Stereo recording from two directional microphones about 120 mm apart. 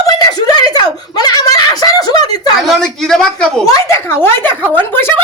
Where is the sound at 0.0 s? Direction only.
35° left (ahead or behind).